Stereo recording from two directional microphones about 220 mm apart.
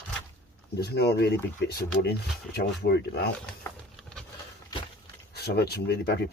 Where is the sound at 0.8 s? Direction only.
50° left (ahead or behind).